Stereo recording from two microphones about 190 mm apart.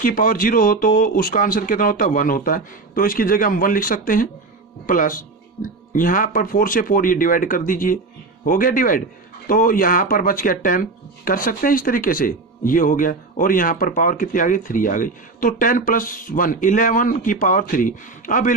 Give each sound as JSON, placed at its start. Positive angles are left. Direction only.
{"t": 0.0, "sound": "speech", "side_deg": 50}